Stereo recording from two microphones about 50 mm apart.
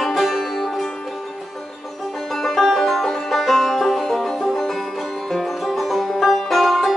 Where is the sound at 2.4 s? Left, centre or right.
Centre.